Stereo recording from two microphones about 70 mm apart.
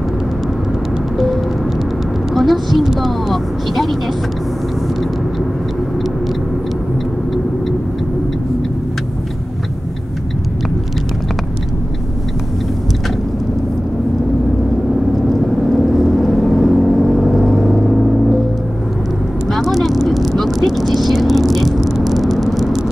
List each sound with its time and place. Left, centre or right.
1.1 s vehicle: centre
2.3 s speech: centre
15.7 s gong: centre
19.4 s vehicle: centre